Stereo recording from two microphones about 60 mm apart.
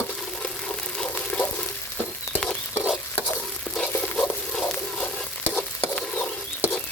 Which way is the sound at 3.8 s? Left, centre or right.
Left.